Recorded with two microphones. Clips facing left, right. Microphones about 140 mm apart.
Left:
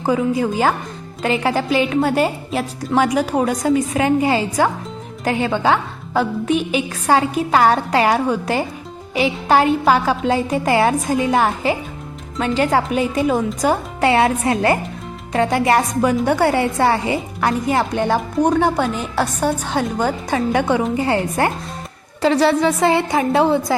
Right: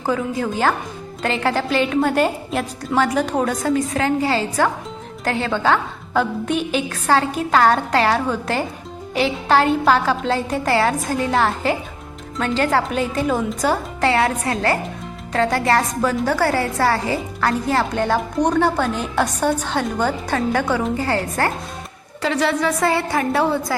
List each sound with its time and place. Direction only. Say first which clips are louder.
1.2 s a woman's voice: left 2 dB; 10° left (ahead or behind)
22.2 s a woman's voice: left 5 dB; 35° left (ahead or behind)